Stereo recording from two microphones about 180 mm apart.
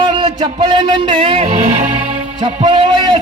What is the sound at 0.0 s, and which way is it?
A man's voice, 25° right (ahead or behind).